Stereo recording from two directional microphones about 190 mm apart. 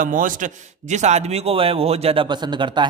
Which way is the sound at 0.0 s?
45° right (ahead or behind).